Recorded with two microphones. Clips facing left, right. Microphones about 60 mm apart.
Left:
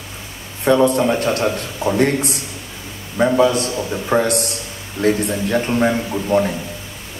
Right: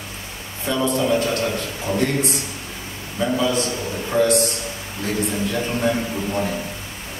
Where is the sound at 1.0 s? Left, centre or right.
Left.